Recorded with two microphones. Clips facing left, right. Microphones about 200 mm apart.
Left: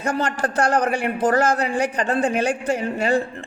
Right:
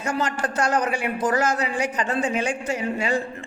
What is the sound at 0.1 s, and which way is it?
A man's voice, 60° left (ahead or behind).